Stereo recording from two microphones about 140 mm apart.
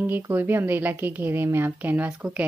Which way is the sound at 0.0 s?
15° right (ahead or behind).